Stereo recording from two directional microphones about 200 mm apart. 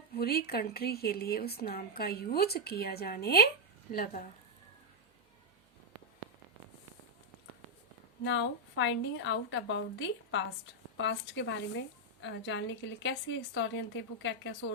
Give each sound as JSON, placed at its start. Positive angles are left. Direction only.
{"t": 0.1, "sound": "speech", "side_deg": 50}
{"t": 8.2, "sound": "a woman's voice", "side_deg": 65}